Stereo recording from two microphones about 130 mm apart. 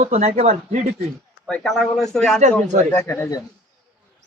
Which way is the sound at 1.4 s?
5° left (ahead or behind).